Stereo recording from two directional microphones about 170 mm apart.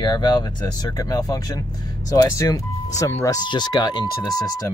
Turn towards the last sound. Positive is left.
turn(degrees=20)  # may be behind; listen again after turning